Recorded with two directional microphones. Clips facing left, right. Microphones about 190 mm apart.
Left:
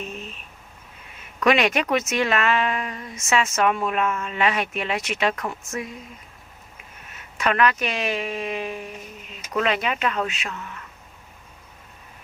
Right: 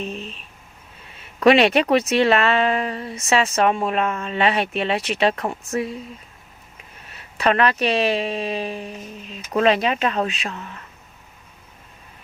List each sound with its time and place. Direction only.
1.4 s speech: 30° right (ahead or behind)
7.1 s speech: 35° right (ahead or behind)